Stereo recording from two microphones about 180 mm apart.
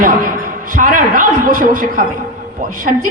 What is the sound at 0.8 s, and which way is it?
A man's voice, 50° right (ahead or behind).